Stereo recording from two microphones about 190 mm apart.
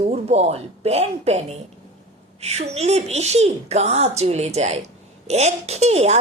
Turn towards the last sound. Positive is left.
turn(degrees=-35)  # may be behind; listen again after turning